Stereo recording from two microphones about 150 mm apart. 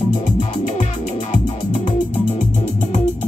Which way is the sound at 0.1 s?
55° left (ahead or behind).